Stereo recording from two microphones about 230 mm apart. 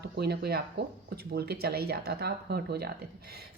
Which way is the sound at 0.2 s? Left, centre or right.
Right.